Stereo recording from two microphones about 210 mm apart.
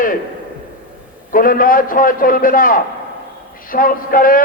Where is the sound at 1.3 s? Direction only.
40° left (ahead or behind).